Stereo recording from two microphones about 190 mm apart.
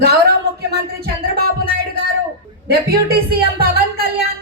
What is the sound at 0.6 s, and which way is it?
Music, 55° right (ahead or behind).